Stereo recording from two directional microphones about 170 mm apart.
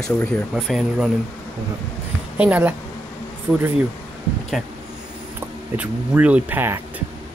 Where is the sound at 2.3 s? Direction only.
10° right (ahead or behind).